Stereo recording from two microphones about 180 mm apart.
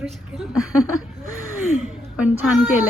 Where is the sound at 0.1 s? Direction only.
Centre (ahead or behind).